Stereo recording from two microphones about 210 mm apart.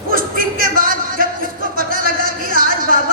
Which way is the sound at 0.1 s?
40° right (ahead or behind).